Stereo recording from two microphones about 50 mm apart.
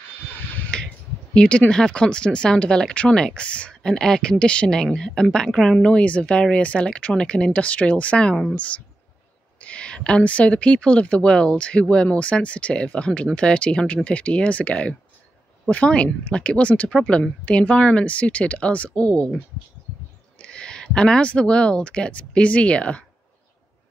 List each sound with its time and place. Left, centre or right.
0.7 s finger snapping: centre
1.3 s speech: centre
3.8 s speech: centre
5.9 s speech: left
9.6 s speech: left
20.3 s speech: centre